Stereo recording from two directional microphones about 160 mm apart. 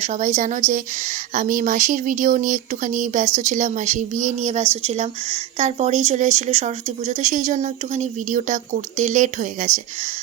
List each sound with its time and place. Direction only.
0.0 s speech: 45° right (ahead or behind)